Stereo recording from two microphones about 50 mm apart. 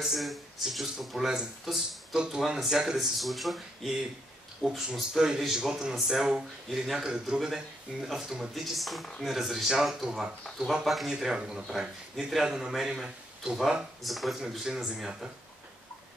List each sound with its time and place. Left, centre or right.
0.0 s speech: centre
3.2 s speech: centre
4.9 s speech: centre
14.0 s speech: centre